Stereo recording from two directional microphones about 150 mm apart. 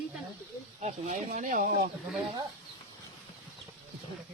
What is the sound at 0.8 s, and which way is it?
Speech, 45° right (ahead or behind).